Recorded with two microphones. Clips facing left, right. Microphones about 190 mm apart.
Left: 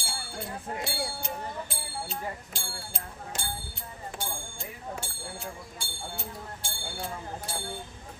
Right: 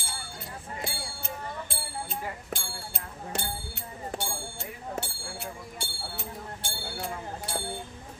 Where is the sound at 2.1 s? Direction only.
55° right (ahead or behind).